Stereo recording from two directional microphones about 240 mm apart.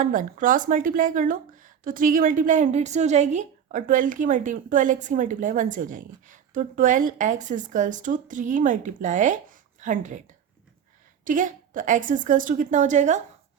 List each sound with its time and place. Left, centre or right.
0.0 s a woman's voice: right
11.3 s a woman's voice: right